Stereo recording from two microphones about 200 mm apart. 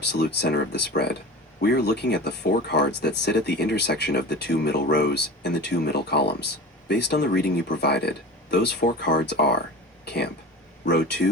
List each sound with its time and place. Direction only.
0.0 s speech: 55° left (ahead or behind)
10.8 s speech: 60° left (ahead or behind)